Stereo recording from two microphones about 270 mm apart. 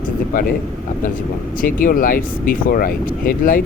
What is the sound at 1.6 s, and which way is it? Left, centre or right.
Speech, left.